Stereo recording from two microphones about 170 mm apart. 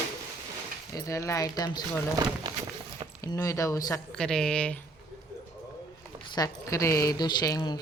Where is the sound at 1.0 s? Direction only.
20° left (ahead or behind).